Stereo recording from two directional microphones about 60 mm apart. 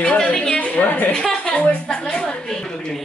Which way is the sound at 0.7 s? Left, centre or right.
Left.